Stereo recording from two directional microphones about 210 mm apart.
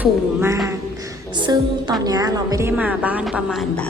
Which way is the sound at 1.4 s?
20° right (ahead or behind).